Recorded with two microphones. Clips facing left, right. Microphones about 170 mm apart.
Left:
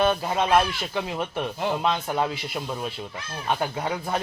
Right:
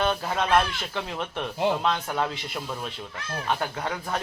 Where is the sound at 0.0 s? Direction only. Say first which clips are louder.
Left 3 dB; 10° left (ahead or behind).